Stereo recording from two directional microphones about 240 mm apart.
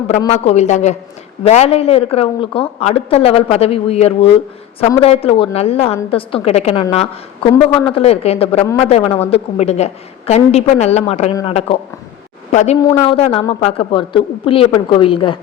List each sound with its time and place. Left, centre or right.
0.3 s a woman's voice: left
7.5 s a man's voice: centre
7.9 s a woman's voice: left